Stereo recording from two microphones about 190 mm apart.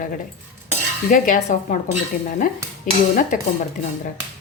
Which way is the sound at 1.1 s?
45° left (ahead or behind).